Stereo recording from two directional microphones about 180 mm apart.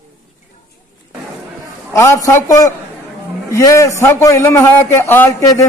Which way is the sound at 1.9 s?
15° left (ahead or behind).